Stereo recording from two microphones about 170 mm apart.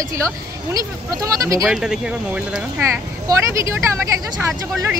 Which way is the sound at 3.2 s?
15° right (ahead or behind).